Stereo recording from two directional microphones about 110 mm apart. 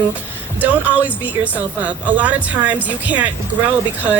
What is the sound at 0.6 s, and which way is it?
Speech, 15° right (ahead or behind).